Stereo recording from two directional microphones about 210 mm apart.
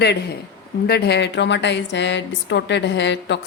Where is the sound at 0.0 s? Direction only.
50° left (ahead or behind).